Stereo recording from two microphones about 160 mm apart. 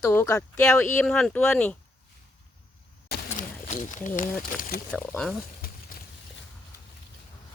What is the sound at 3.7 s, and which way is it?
Speech, 50° left (ahead or behind).